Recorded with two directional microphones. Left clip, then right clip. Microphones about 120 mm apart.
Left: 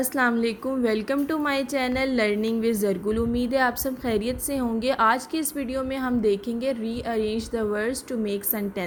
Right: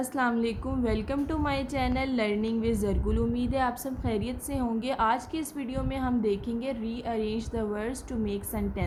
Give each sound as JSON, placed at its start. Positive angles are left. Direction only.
{"t": 0.0, "sound": "a woman's voice", "side_deg": 35}